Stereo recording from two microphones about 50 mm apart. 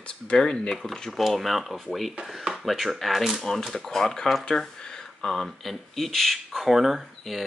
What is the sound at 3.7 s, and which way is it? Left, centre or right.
Speech, centre.